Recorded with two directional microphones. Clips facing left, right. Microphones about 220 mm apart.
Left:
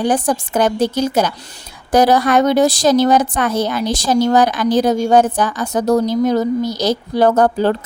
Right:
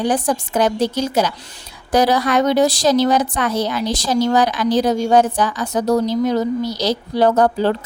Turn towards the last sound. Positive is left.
turn(degrees=50)  # may be behind; listen again after turning